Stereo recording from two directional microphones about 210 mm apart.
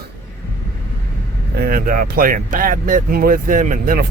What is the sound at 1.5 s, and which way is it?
Speech, 45° right (ahead or behind).